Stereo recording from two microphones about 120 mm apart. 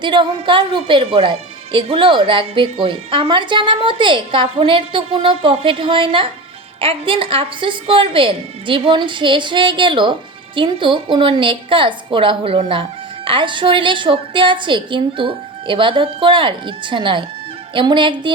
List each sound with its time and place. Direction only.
0.0 s a woman's voice: 40° right (ahead or behind)